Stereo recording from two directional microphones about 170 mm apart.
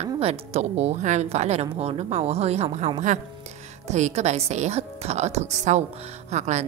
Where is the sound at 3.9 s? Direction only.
40° right (ahead or behind).